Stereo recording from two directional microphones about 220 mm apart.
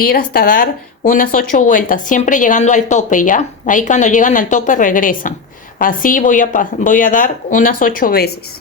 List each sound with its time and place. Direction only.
0.0 s speech: 40° left (ahead or behind)